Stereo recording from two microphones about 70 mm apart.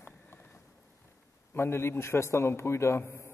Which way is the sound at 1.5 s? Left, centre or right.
Left.